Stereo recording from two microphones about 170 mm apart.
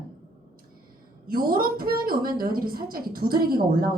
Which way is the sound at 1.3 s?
60° right (ahead or behind).